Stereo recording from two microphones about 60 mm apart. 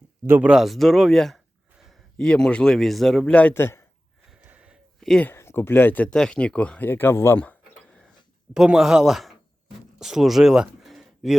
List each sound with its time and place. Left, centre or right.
0.6 s speech: centre
2.1 s speech: centre
2.7 s speech: centre
3.2 s speech: left
3.5 s a man's voice: left
4.4 s a sound: right
4.9 s a sound: centre
5.3 s speech: left
6.1 s speech: centre
6.8 s speech: left
8.5 s speech: centre
10.8 s a sound: centre